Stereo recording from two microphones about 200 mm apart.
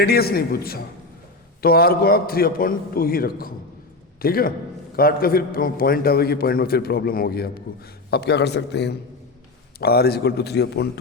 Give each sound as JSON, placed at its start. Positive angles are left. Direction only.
{"t": 0.0, "sound": "a man's voice", "side_deg": 50}